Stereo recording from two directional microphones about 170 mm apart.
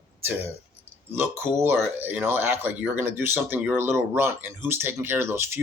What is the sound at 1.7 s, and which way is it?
Speech, 10° right (ahead or behind).